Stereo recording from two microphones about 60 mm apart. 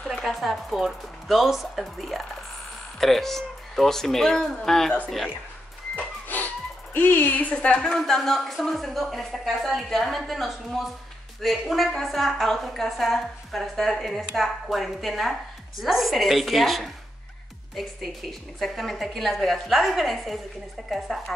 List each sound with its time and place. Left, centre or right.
0.0 s a woman's voice: centre
5.9 s a woman's voice: left; by 21.2 s centre